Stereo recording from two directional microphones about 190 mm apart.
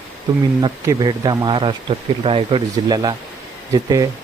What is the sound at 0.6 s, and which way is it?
Speech, 20° right (ahead or behind).